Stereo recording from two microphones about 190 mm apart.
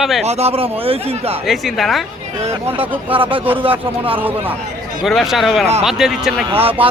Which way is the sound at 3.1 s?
30° right (ahead or behind).